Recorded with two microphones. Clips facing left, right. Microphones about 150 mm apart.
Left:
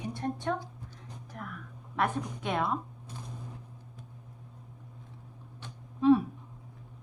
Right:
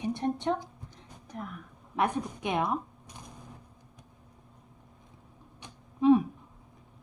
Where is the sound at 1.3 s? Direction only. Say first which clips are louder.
Right 3 dB; 20° right (ahead or behind).